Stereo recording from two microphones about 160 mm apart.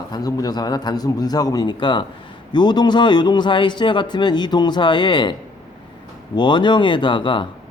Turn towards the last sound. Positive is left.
turn(degrees=30)  # may be behind; listen again after turning